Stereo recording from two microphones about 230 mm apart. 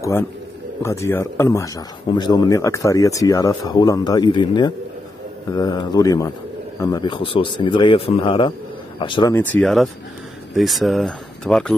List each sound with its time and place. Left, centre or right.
0.8 s a man's voice: centre
9.3 s speech: centre